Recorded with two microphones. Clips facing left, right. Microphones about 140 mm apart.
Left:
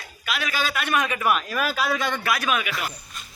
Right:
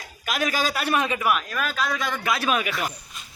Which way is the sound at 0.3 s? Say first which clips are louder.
Right 2 dB; 45° right (ahead or behind).